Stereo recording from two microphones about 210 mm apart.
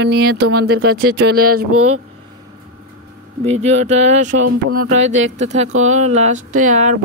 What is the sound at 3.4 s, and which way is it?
Speech, 30° right (ahead or behind).